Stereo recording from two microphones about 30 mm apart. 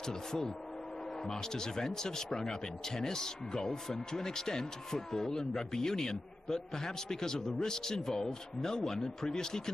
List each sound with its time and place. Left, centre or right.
0.0 s speech: centre